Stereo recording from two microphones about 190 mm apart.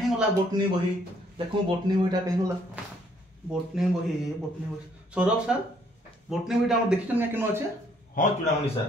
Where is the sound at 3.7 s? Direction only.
Centre (ahead or behind).